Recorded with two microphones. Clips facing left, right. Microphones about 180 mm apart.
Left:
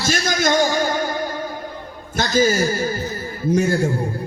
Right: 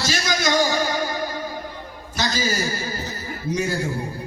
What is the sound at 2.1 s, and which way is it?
Speech, 50° left (ahead or behind).